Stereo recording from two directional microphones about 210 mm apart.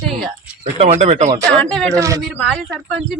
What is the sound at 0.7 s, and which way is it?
Speech, 30° right (ahead or behind).